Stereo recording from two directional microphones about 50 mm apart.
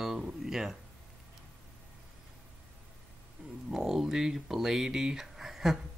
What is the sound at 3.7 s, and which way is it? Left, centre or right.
Speech, centre.